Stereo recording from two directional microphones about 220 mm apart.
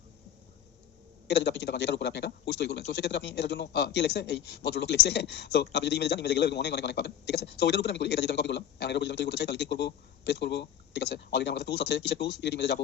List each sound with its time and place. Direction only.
1.3 s a man's voice: 50° left (ahead or behind)